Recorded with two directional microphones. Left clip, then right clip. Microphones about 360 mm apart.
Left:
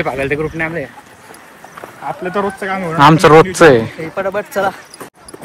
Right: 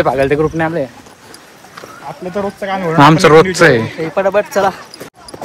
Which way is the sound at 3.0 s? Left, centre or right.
Centre.